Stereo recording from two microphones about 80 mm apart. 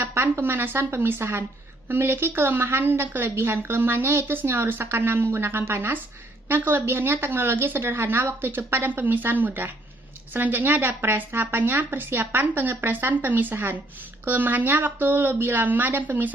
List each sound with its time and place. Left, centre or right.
0.0 s a woman's voice: right